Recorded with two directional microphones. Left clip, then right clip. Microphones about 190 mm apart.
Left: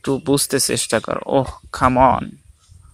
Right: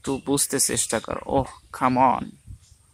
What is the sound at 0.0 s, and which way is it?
Speech, 20° left (ahead or behind).